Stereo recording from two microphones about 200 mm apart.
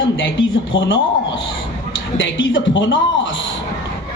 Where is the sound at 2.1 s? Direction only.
65° left (ahead or behind).